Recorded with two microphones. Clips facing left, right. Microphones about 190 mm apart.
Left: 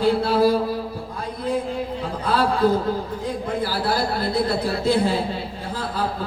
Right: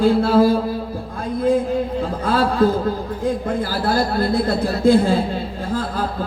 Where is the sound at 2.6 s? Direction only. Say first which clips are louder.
Right 2 dB; 50° right (ahead or behind).